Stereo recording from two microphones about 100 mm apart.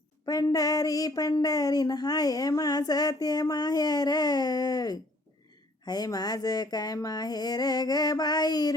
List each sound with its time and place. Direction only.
0.5 s speech: 40° left (ahead or behind)